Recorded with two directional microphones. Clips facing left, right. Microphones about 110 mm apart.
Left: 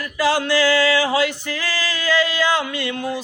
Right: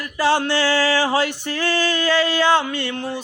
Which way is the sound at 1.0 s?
35° right (ahead or behind).